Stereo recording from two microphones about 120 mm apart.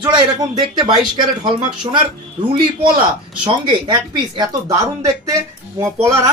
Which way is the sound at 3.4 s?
40° right (ahead or behind).